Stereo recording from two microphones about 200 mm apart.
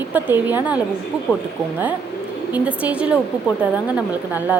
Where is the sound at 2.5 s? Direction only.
5° right (ahead or behind).